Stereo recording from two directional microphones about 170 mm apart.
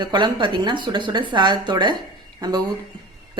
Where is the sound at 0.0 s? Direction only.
25° right (ahead or behind).